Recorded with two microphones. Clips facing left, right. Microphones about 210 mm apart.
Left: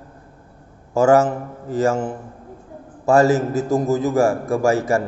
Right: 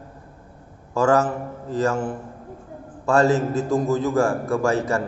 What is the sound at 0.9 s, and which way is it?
A man's voice, 25° left (ahead or behind).